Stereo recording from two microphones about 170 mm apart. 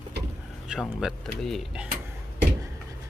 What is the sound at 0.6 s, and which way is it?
Speech, centre (ahead or behind).